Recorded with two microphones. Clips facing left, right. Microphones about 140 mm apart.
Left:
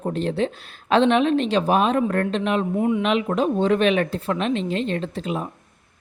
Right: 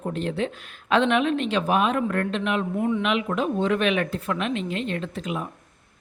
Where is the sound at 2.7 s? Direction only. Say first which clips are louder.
Left 3 dB; 20° left (ahead or behind).